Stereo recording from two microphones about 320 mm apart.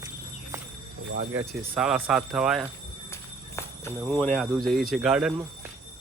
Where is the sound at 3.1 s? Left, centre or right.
Centre.